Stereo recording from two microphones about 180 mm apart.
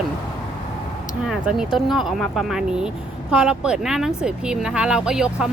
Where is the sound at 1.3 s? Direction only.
5° right (ahead or behind).